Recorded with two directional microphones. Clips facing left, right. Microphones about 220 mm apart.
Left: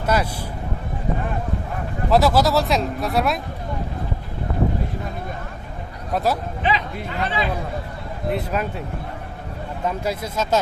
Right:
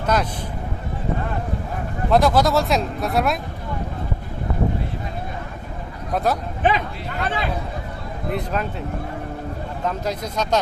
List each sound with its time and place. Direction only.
0.0 s speech: 5° left (ahead or behind)
2.0 s speech: 5° left (ahead or behind)
6.1 s speech: 5° left (ahead or behind)
6.6 s speech: 50° right (ahead or behind)
8.3 s speech: 5° left (ahead or behind)
9.8 s speech: 10° left (ahead or behind)